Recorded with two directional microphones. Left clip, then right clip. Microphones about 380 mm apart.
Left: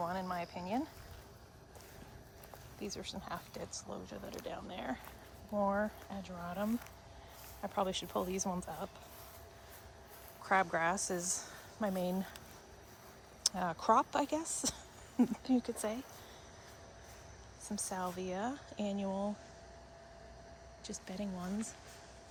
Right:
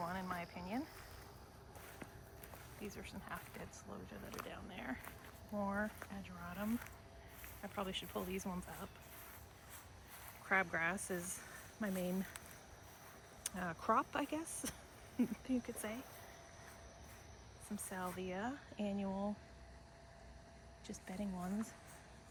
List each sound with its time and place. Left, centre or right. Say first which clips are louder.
0.0 s cricket: left 5 dB; centre
3.0 s speech: left 6 dB; centre
10.5 s speech: left 5 dB; centre
13.4 s speech: left 8 dB; centre
17.7 s speech: left 6 dB; centre
20.8 s speech: left 4 dB; centre